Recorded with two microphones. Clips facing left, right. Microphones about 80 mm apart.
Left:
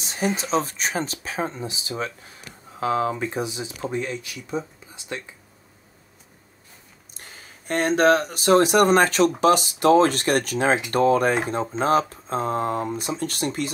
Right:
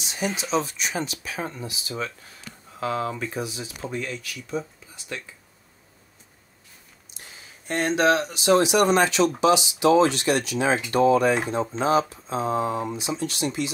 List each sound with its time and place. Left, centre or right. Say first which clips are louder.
0.0 s speech: left 3 dB; left
7.2 s speech: left 2 dB; left